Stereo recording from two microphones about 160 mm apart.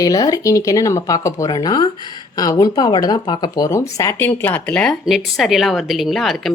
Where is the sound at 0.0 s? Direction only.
25° left (ahead or behind).